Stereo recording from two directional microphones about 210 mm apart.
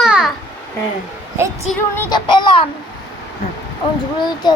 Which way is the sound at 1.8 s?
10° left (ahead or behind).